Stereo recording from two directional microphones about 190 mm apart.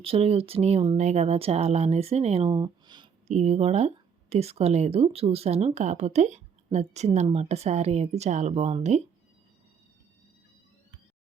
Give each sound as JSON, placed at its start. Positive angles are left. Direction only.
{"t": 0.0, "sound": "speech", "side_deg": -30}
{"t": 3.2, "sound": "speech", "side_deg": -35}